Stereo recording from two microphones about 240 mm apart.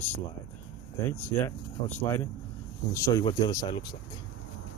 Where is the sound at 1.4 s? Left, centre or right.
Centre.